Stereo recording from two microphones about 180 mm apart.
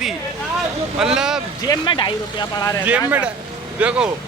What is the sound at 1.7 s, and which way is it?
Speech, 25° left (ahead or behind).